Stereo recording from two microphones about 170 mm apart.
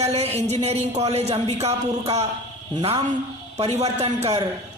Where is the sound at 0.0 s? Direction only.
35° right (ahead or behind).